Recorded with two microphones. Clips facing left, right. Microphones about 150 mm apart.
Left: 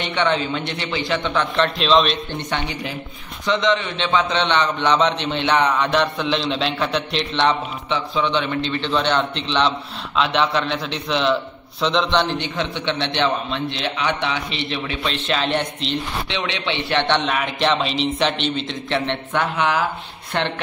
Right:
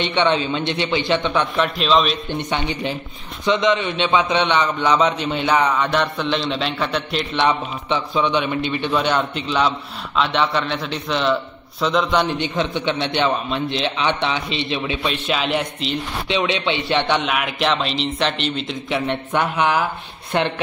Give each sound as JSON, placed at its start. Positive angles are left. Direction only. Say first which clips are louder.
{"t": 0.0, "sound": "a man's voice", "louder": "right 2 dB", "side_deg": -20}
{"t": 1.6, "sound": "a man's voice", "louder": "left 2 dB", "side_deg": -5}
{"t": 3.4, "sound": "a man's voice", "louder": "right 2 dB", "side_deg": -20}
{"t": 12.4, "sound": "a man's voice", "louder": "right 3 dB", "side_deg": -15}
{"t": 15.2, "sound": "a man's voice", "louder": "left 1 dB", "side_deg": -5}
{"t": 16.3, "sound": "a man's voice", "louder": "right 5 dB", "side_deg": -15}
{"t": 17.2, "sound": "a man's voice", "louder": "even", "side_deg": -5}